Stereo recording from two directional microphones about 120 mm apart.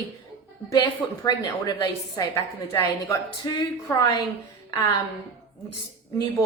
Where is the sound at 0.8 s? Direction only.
35° left (ahead or behind).